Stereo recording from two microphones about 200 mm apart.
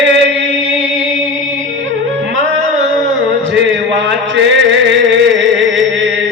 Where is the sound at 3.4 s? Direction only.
60° right (ahead or behind).